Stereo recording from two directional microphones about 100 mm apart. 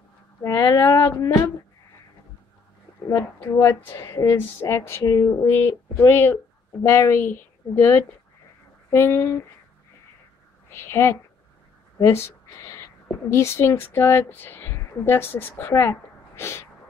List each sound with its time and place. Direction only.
0.4 s speech: 35° left (ahead or behind)
3.3 s a woman's voice: 25° left (ahead or behind)
10.7 s a woman's voice: 25° left (ahead or behind)
12.0 s a sound: 30° left (ahead or behind)
13.3 s a woman's voice: 25° left (ahead or behind)